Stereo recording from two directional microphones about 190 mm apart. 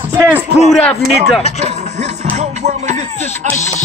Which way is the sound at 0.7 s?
5° left (ahead or behind).